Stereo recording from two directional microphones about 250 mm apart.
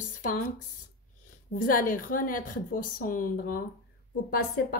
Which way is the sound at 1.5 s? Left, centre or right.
Left.